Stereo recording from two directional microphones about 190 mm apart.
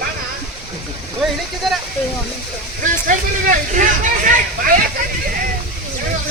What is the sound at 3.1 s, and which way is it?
Speech, 45° right (ahead or behind).